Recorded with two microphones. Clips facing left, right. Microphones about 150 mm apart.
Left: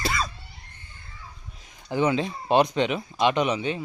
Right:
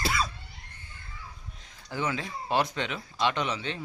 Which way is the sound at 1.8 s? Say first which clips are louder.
Left 8 dB; 20° left (ahead or behind).